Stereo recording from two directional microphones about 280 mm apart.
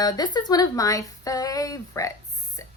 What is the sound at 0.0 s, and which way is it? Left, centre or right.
A woman's voice, centre.